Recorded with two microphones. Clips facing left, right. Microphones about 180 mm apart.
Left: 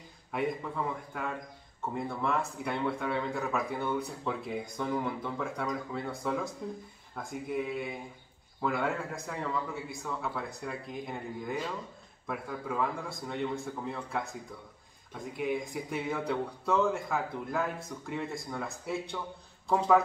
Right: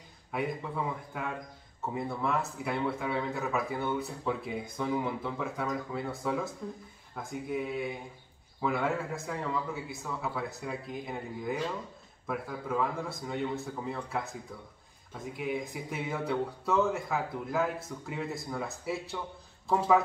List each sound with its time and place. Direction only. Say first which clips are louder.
0.3 s speech: left 1 dB; 5° right (ahead or behind)